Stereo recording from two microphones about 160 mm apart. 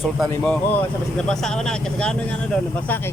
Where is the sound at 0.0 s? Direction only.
Centre (ahead or behind).